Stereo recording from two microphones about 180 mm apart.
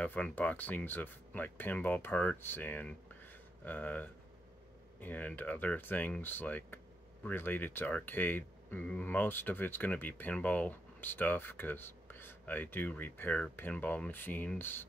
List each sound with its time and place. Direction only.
0.0 s speech: 10° left (ahead or behind)